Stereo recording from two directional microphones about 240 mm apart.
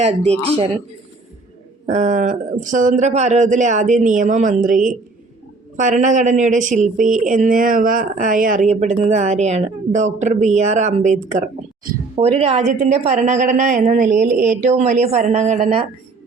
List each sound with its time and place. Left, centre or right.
0.0 s a woman's voice: right
1.9 s a woman's voice: right